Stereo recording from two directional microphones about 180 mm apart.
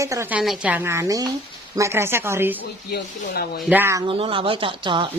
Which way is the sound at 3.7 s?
10° right (ahead or behind).